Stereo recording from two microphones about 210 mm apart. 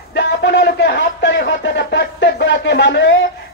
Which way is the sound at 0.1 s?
60° left (ahead or behind).